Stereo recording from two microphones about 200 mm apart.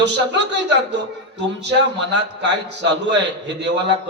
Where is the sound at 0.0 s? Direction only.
60° right (ahead or behind).